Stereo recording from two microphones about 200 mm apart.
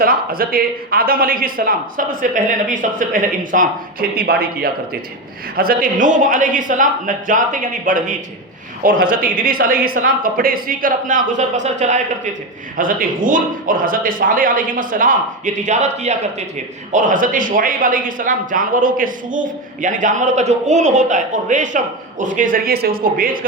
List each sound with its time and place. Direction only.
0.0 s a man's voice: 45° right (ahead or behind)